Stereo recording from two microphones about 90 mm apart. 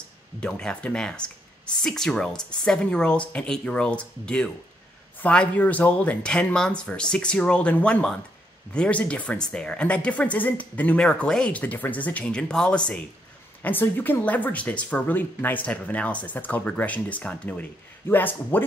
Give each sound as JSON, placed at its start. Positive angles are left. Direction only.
{"t": 0.4, "sound": "speech", "side_deg": 10}
{"t": 13.6, "sound": "speech", "side_deg": 20}